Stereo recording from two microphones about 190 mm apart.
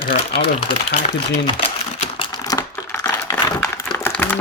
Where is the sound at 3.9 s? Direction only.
10° left (ahead or behind).